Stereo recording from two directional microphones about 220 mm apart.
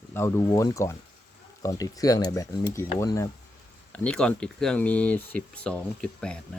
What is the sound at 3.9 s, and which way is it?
Speech, 5° left (ahead or behind).